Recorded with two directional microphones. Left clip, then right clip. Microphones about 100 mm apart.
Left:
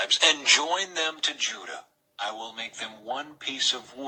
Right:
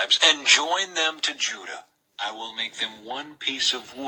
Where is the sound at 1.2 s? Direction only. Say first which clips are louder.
Right 2 dB; 30° right (ahead or behind).